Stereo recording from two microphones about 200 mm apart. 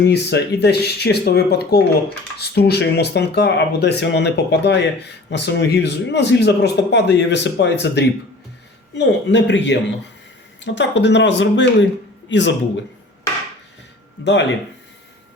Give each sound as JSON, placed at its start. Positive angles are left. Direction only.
{"t": 0.0, "sound": "speech", "side_deg": 55}